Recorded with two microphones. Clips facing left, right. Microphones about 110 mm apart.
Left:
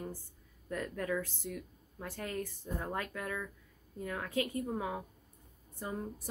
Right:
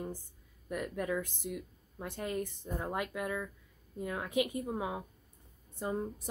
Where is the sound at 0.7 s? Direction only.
15° right (ahead or behind).